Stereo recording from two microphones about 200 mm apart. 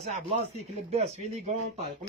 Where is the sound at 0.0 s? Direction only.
35° right (ahead or behind).